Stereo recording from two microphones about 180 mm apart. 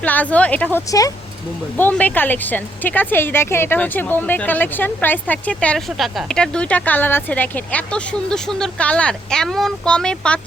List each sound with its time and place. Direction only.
0.0 s speech: 10° left (ahead or behind)